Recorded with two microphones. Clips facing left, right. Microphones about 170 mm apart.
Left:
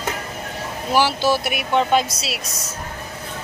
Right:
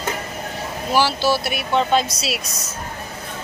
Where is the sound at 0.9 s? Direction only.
15° left (ahead or behind).